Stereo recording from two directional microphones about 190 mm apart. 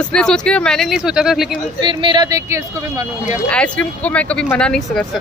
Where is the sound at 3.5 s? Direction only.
5° left (ahead or behind).